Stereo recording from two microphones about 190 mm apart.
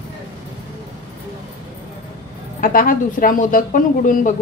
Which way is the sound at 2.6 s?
45° left (ahead or behind).